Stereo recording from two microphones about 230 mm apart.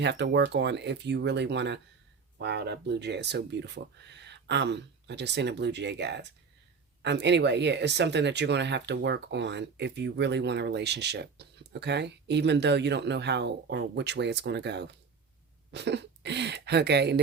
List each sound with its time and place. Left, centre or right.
0.0 s speech: right